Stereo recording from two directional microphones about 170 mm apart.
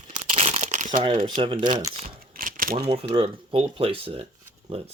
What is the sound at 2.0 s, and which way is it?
Typewriter, 55° right (ahead or behind).